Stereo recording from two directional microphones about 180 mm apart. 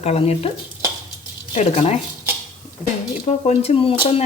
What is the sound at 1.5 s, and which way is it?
Speech, 35° left (ahead or behind).